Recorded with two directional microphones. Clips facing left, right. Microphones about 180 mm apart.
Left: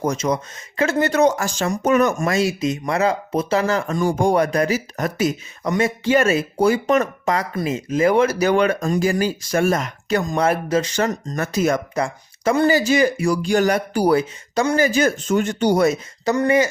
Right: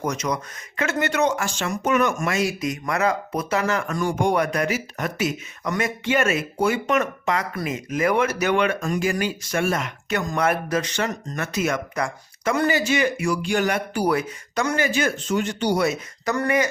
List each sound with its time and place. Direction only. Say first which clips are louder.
0.0 s speech: left 5 dB; 30° left (ahead or behind); by 16.0 s 45° left (ahead or behind)
16.2 s speech: left 5 dB; 25° left (ahead or behind)